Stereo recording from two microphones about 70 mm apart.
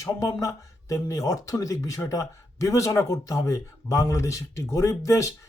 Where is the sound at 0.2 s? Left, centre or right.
Left.